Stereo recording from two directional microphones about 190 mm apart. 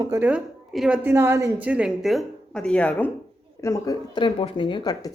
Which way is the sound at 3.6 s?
15° left (ahead or behind).